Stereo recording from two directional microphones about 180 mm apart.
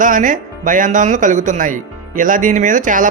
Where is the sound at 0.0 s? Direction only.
45° right (ahead or behind).